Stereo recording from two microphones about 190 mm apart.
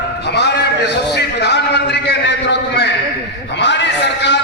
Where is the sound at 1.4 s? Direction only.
60° left (ahead or behind).